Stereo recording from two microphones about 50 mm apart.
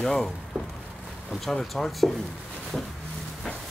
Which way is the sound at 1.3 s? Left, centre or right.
Centre.